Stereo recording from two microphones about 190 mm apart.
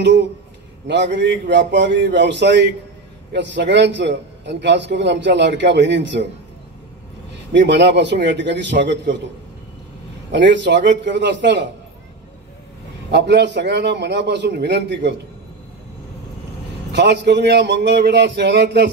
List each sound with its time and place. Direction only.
0.8 s a man's voice: 70° right (ahead or behind)
7.5 s a man's voice: 65° right (ahead or behind)
10.3 s a man's voice: 70° right (ahead or behind)
13.1 s a man's voice: 65° right (ahead or behind)
16.9 s a man's voice: 65° right (ahead or behind)